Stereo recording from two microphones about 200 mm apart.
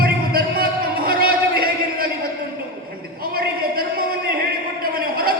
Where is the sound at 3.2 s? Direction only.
45° right (ahead or behind).